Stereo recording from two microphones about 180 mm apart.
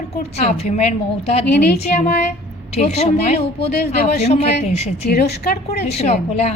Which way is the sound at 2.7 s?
35° left (ahead or behind).